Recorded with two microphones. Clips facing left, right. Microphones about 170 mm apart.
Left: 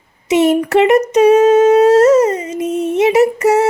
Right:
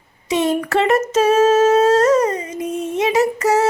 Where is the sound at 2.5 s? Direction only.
75° left (ahead or behind).